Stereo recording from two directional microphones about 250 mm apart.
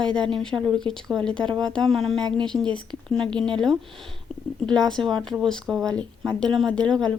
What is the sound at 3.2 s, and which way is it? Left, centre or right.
Speech, centre.